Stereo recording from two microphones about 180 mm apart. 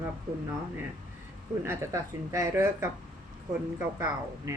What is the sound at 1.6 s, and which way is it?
Speech, 15° right (ahead or behind).